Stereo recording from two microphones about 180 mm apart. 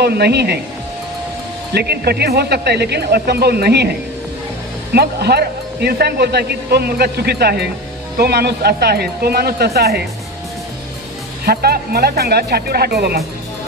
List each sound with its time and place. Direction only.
0.0 s a man's voice: 65° right (ahead or behind)
1.7 s a man's voice: 65° right (ahead or behind)
4.9 s a man's voice: 65° right (ahead or behind)
11.4 s a man's voice: 60° right (ahead or behind)